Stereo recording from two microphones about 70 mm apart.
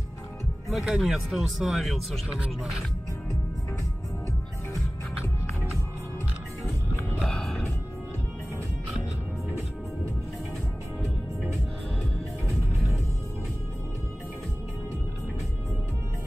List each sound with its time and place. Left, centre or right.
0.7 s speech: centre
7.2 s music: centre
12.4 s music: right